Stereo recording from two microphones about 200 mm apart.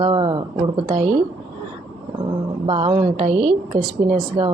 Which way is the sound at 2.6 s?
25° right (ahead or behind).